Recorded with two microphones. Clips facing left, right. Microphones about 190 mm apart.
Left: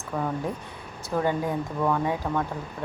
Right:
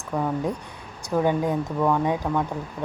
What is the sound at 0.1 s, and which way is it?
Speech, 15° right (ahead or behind).